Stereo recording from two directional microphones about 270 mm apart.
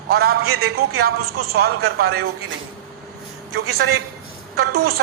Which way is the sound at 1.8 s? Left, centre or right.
Right.